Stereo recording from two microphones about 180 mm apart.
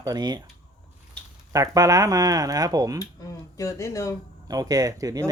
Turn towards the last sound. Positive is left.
turn(degrees=-20)  # may be behind; listen again after turning